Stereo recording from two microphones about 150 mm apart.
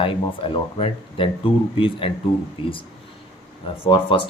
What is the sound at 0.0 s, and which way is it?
Speech, 35° left (ahead or behind).